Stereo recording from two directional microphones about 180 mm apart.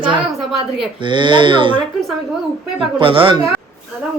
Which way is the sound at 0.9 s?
25° right (ahead or behind).